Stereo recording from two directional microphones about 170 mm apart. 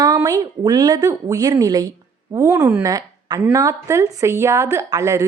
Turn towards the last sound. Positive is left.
turn(degrees=-20)  # may be behind; listen again after turning